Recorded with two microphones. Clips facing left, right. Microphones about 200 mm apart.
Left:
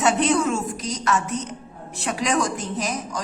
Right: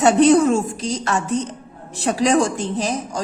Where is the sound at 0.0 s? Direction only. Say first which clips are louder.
Right 7 dB; 35° right (ahead or behind).